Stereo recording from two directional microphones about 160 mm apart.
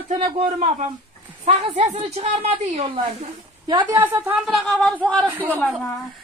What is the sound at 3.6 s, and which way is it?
Speech, 25° right (ahead or behind).